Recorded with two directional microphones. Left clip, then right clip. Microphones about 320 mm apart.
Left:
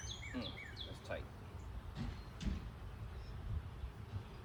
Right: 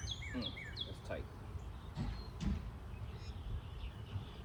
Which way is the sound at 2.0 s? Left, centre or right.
Centre.